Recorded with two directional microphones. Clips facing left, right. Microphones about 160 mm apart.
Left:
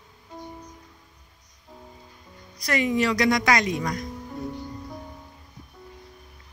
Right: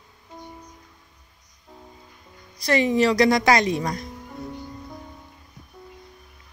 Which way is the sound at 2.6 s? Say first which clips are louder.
Right 4 dB; 30° right (ahead or behind).